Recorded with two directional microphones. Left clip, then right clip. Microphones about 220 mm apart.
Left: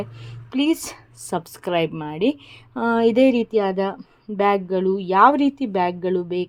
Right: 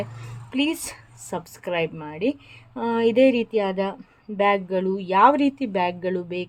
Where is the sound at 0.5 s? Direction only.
20° left (ahead or behind).